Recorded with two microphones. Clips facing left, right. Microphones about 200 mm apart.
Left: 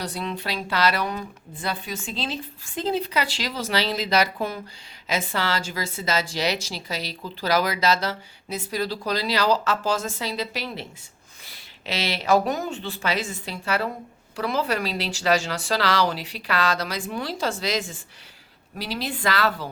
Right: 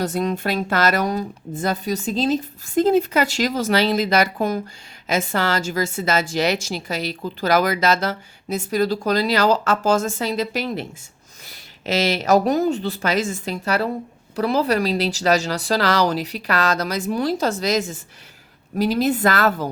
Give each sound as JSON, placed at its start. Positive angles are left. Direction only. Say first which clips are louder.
{"t": 0.0, "sound": "a woman's voice", "louder": "right 8 dB", "side_deg": -45}